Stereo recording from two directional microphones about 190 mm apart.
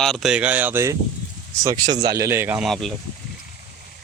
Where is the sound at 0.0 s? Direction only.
Centre (ahead or behind).